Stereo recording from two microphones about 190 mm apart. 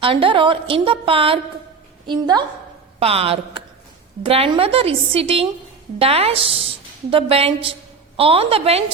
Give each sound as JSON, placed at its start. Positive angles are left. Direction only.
{"t": 0.0, "sound": "a woman's voice", "side_deg": -30}